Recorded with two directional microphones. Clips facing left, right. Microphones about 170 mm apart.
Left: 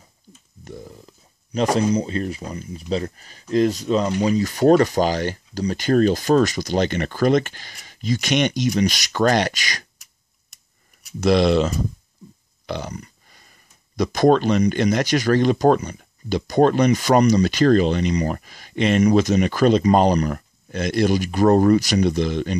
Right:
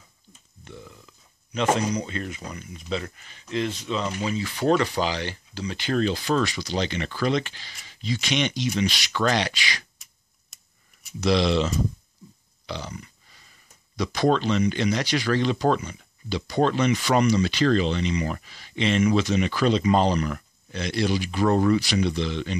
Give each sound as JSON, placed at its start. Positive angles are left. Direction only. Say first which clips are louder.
{"t": 0.7, "sound": "speech", "louder": "left 6 dB", "side_deg": 40}
{"t": 11.0, "sound": "speech", "louder": "left 5 dB", "side_deg": 50}